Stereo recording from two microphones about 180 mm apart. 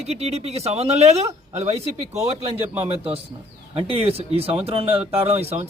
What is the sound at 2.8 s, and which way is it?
Speech, 30° right (ahead or behind).